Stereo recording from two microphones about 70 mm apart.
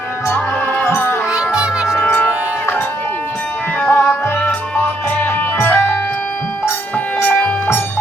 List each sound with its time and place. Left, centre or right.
0.3 s music: left
1.5 s music: centre
3.8 s music: left
7.2 s music: left